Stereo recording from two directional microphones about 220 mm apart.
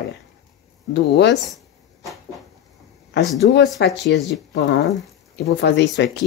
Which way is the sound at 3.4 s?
50° left (ahead or behind).